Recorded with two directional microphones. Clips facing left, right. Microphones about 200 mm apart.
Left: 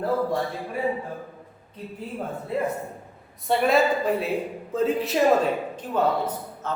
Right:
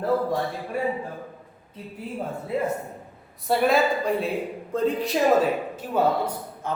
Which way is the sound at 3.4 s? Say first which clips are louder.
Even; centre (ahead or behind).